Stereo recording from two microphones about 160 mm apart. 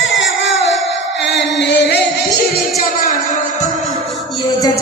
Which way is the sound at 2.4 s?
70° left (ahead or behind).